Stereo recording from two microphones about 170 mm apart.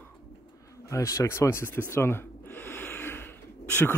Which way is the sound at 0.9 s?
20° left (ahead or behind).